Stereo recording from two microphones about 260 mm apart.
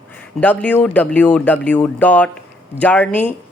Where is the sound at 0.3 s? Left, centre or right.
Centre.